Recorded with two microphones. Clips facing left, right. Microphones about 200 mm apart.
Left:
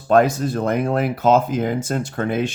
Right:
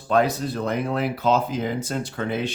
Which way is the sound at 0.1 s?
50° left (ahead or behind).